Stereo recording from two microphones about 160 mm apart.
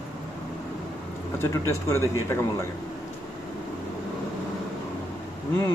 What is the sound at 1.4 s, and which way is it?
Speech, 15° left (ahead or behind).